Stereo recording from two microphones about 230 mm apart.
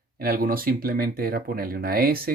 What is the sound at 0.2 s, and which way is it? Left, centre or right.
Speech, right.